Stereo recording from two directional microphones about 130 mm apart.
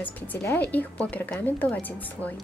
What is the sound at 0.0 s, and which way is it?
A woman's voice, 15° left (ahead or behind).